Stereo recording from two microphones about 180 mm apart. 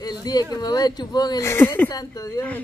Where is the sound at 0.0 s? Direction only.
20° left (ahead or behind).